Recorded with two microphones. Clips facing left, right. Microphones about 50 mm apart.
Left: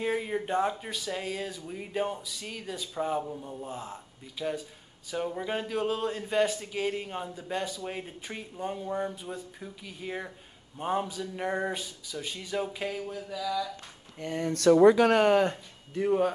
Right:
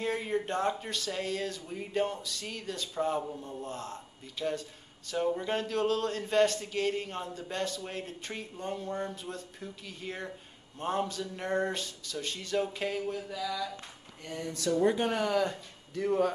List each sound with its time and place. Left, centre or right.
0.0 s a man's voice: centre
14.2 s speech: left
14.5 s speech: left
15.2 s speech: left
15.5 s speech: left